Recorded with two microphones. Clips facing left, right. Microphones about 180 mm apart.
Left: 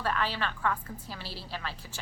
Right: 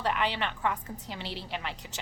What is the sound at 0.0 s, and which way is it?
A woman's voice, 20° right (ahead or behind).